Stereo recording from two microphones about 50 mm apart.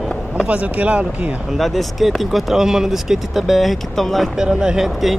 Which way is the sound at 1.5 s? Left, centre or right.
Centre.